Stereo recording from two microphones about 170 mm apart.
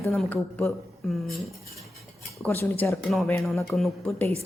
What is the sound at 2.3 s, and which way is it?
Speech, 10° left (ahead or behind).